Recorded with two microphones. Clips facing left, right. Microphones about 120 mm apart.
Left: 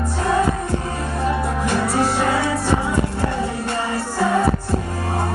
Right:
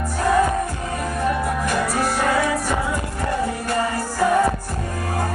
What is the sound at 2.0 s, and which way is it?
Music, 25° left (ahead or behind).